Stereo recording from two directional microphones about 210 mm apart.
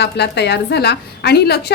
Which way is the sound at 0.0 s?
55° left (ahead or behind).